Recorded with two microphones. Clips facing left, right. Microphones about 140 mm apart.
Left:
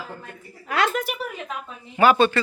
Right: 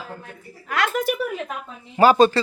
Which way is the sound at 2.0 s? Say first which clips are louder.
Right 3 dB; 35° right (ahead or behind).